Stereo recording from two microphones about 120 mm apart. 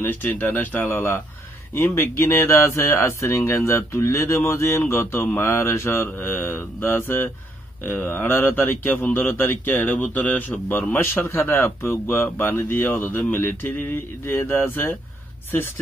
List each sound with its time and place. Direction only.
0.0 s speech: 15° left (ahead or behind)